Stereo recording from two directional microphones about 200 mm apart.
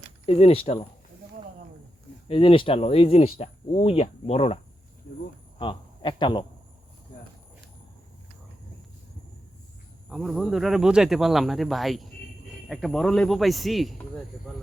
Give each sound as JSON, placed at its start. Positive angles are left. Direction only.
{"t": 0.3, "sound": "speech", "side_deg": 30}
{"t": 2.2, "sound": "speech", "side_deg": 25}
{"t": 10.1, "sound": "speech", "side_deg": 0}